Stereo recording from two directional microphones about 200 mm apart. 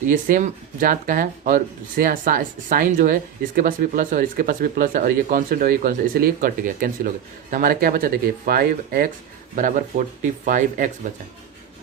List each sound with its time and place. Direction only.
0.1 s speech: 40° right (ahead or behind)